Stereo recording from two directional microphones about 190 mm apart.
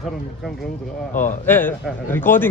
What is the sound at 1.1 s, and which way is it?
Speech, 45° left (ahead or behind).